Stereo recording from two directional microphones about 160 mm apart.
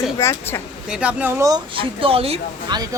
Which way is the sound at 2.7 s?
25° right (ahead or behind).